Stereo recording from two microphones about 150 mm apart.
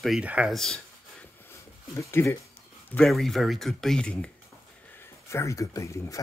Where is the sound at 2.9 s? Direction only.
5° left (ahead or behind).